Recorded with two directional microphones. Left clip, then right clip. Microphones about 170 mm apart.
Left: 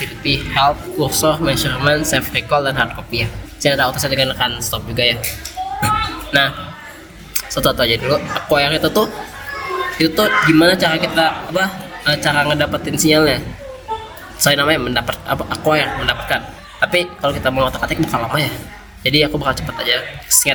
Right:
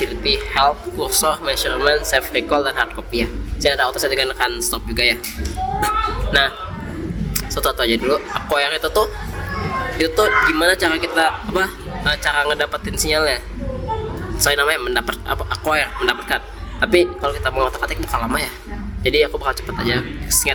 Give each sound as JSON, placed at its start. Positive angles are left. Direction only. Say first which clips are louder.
{"t": 0.0, "sound": "speech", "louder": "even", "side_deg": -55}
{"t": 7.3, "sound": "speech", "louder": "left 4 dB", "side_deg": -50}